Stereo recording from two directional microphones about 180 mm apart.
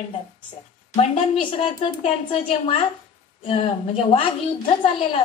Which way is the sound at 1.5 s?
30° left (ahead or behind).